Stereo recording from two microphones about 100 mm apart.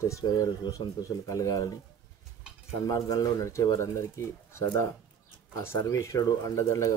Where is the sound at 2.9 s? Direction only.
40° left (ahead or behind).